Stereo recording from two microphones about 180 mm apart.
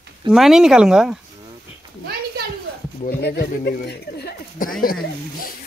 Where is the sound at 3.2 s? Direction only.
65° left (ahead or behind).